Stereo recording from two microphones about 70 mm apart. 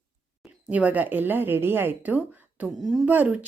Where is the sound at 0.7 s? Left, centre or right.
Right.